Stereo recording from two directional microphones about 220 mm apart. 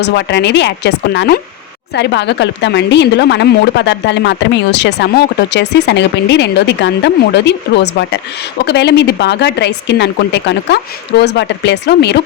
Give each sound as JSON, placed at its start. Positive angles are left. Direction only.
{"t": 0.0, "sound": "a woman's voice", "side_deg": 50}